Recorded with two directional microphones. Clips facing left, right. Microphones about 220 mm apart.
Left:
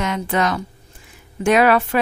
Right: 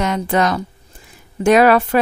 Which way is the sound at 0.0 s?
40° right (ahead or behind).